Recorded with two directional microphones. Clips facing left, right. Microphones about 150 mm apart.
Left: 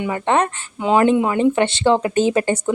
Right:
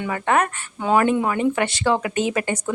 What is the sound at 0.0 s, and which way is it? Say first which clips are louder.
A woman's voice: left 2 dB; 25° left (ahead or behind).